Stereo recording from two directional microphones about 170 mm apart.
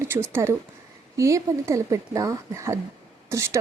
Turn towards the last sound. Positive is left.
turn(degrees=-20)  # may be behind; listen again after turning